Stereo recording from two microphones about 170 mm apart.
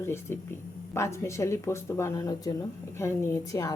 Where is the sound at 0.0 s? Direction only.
15° left (ahead or behind).